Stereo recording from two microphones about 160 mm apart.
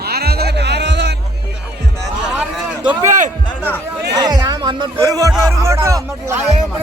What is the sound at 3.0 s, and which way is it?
Speech, 50° right (ahead or behind).